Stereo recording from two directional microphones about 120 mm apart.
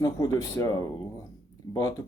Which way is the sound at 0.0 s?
30° left (ahead or behind).